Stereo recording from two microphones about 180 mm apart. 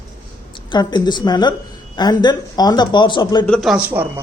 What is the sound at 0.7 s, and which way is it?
Speech, 25° left (ahead or behind).